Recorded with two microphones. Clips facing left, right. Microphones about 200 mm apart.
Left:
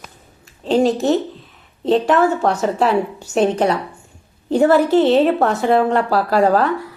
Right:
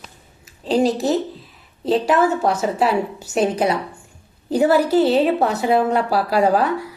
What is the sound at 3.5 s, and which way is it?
Speech, 40° left (ahead or behind).